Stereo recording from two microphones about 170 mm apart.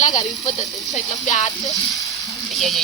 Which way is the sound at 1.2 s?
45° left (ahead or behind).